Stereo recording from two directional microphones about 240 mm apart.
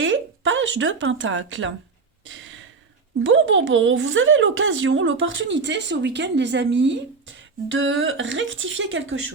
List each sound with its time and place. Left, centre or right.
0.0 s speech: right
2.2 s a sound: right
3.2 s speech: right